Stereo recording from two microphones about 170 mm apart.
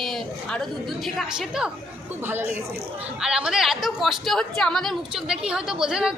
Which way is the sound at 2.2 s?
15° right (ahead or behind).